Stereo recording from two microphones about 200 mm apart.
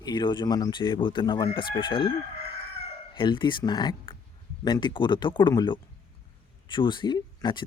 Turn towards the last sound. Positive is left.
turn(degrees=20)  # may be behind; listen again after turning